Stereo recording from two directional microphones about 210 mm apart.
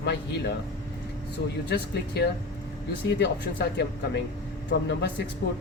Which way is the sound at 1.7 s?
50° left (ahead or behind).